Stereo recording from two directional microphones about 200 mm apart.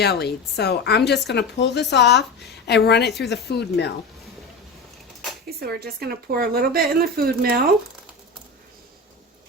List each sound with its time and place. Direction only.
0.0 s a woman's voice: 55° left (ahead or behind)
5.5 s a woman's voice: 50° right (ahead or behind)